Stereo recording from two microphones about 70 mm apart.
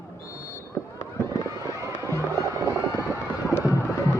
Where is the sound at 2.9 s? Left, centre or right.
Left.